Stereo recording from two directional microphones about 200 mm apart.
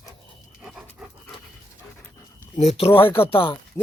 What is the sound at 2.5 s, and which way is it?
Speech, 30° left (ahead or behind).